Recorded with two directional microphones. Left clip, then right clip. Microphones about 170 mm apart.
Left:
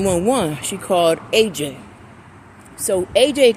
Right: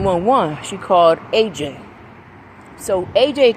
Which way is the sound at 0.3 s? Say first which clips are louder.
Right 3 dB; 35° left (ahead or behind).